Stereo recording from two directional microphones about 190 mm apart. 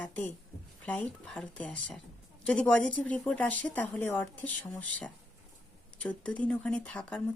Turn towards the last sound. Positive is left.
turn(degrees=5)  # may be behind; listen again after turning